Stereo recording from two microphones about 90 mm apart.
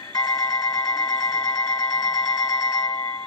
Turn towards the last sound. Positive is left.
turn(degrees=45)  # may be behind; listen again after turning